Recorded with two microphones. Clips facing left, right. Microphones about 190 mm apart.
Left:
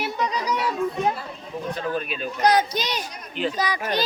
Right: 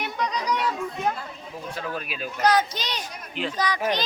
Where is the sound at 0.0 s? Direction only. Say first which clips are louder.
Left 2 dB; 5° left (ahead or behind).